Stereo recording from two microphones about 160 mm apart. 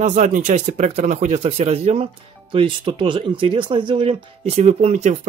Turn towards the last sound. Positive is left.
turn(degrees=-45)  # may be behind; listen again after turning